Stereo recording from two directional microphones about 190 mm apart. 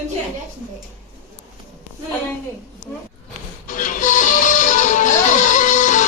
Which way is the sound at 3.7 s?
45° left (ahead or behind).